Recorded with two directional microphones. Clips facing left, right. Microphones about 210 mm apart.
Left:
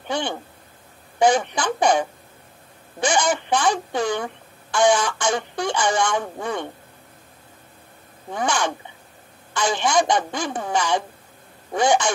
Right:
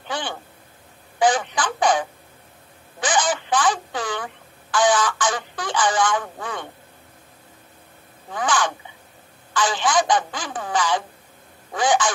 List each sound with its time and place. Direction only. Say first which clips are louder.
0.1 s a sound: left 4 dB; 25° left (ahead or behind)
1.2 s speech: left 2 dB; 25° left (ahead or behind)
3.1 s speech: left 1 dB; 25° left (ahead or behind)
8.3 s speech: even; 25° left (ahead or behind)